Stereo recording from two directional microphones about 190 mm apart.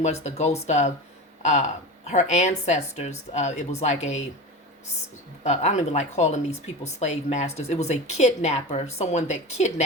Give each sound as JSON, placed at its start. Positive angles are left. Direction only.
{"t": 0.0, "sound": "a woman's voice", "side_deg": 35}
{"t": 5.4, "sound": "a woman's voice", "side_deg": 40}